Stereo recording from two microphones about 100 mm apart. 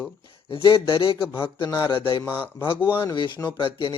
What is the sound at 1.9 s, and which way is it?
Speech, 55° left (ahead or behind).